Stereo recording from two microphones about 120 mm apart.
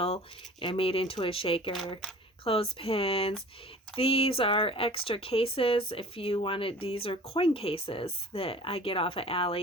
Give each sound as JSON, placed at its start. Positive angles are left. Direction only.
{"t": 0.6, "sound": "speech", "side_deg": 50}